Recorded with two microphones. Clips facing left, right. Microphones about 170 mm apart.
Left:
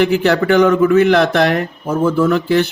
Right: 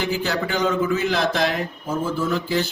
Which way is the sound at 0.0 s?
65° left (ahead or behind).